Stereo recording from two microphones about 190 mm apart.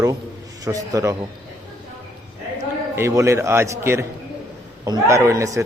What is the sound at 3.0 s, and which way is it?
A man's voice, 15° right (ahead or behind).